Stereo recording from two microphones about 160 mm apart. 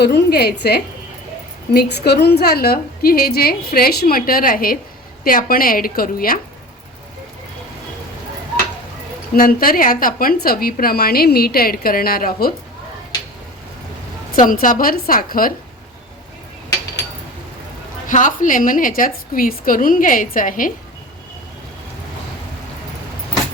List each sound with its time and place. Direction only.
0.0 s a woman's voice: 90° left; by 6.4 s 65° left (ahead or behind)
9.3 s a woman's voice: 65° left (ahead or behind)
14.3 s a woman's voice: 60° left (ahead or behind)
18.1 s a woman's voice: 55° left (ahead or behind)